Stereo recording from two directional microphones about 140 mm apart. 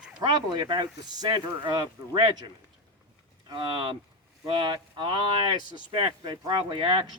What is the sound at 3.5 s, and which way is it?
Speech, 35° right (ahead or behind).